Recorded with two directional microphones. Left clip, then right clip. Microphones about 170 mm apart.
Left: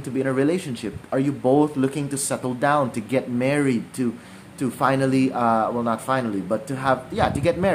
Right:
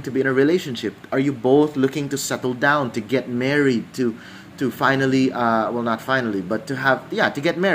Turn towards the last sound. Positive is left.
turn(degrees=10)  # may be behind; listen again after turning